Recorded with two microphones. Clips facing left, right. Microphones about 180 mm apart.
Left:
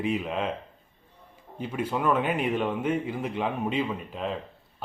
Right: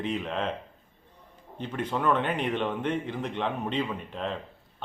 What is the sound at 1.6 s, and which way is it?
Speech, 10° left (ahead or behind).